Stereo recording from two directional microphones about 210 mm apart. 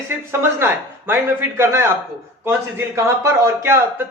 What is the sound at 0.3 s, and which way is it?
A man's voice, 10° right (ahead or behind).